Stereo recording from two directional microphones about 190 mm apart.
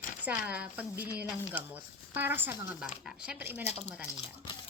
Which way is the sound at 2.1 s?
10° right (ahead or behind).